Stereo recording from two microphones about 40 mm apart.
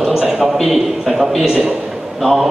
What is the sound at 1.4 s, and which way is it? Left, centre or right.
Speech, right.